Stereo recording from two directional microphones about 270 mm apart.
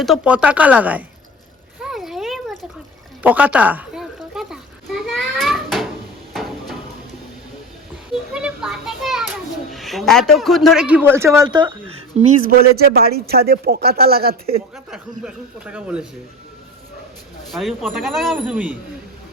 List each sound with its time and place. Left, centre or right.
0.0 s a man's voice: centre
1.8 s a sound: centre
8.3 s children playing: centre
9.7 s a man's voice: centre; by 14.3 s right
14.8 s a man's voice: centre
17.5 s a man's voice: centre